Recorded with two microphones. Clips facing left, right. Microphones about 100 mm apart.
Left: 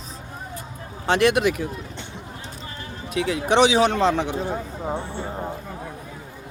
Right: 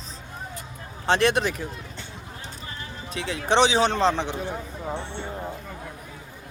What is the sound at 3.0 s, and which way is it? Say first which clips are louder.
Speech: left 4 dB; 30° right (ahead or behind).